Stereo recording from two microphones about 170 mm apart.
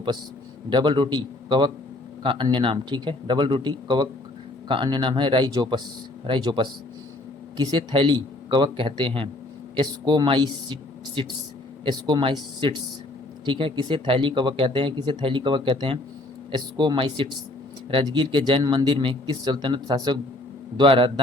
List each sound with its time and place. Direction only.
0.7 s a man's voice: 25° right (ahead or behind)